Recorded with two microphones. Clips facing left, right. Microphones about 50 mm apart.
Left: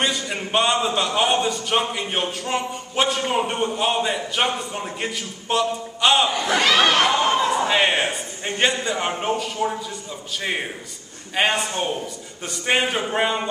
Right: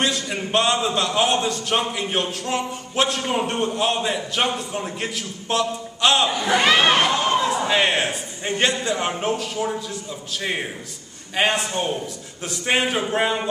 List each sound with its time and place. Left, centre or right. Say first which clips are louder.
0.0 s a man's voice: even; centre
6.6 s speech: right 1 dB; right
7.1 s a man's voice: left 1 dB; centre